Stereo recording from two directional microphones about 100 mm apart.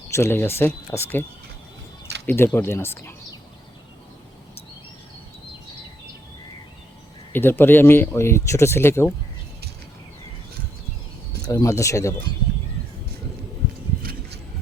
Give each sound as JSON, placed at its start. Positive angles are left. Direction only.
{"t": 0.1, "sound": "speech", "side_deg": 25}
{"t": 2.2, "sound": "speech", "side_deg": 25}
{"t": 7.3, "sound": "speech", "side_deg": 20}
{"t": 11.4, "sound": "speech", "side_deg": 35}